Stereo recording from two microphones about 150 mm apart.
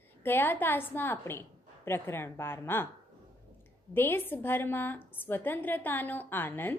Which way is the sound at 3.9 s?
15° left (ahead or behind).